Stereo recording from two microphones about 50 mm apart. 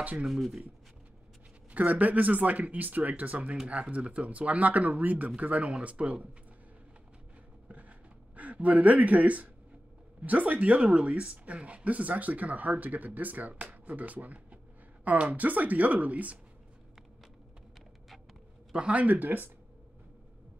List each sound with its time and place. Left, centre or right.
0.0 s speech: right
0.3 s speech: centre
1.7 s speech: right
8.4 s speech: right
18.7 s speech: right